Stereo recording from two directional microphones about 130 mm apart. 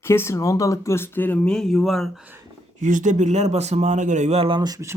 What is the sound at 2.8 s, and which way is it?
Speech, 75° right (ahead or behind).